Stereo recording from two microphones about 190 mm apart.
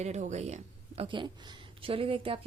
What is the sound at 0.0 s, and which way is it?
A woman's voice, 35° right (ahead or behind).